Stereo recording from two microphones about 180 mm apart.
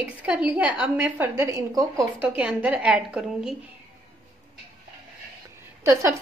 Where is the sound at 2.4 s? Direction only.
5° right (ahead or behind).